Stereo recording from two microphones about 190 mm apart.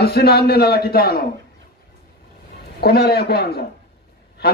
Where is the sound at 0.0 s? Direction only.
55° left (ahead or behind).